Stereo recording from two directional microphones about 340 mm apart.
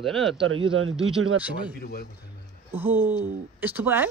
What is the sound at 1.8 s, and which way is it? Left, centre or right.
Speech, left.